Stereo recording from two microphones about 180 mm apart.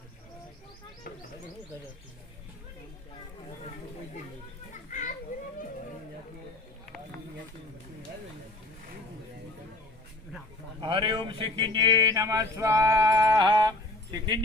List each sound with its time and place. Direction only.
4.9 s children playing: 45° left (ahead or behind)
10.8 s speech: 25° right (ahead or behind)